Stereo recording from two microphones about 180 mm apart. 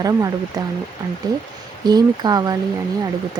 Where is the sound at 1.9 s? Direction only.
20° right (ahead or behind).